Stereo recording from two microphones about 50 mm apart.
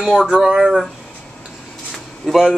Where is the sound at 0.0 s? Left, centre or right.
Centre.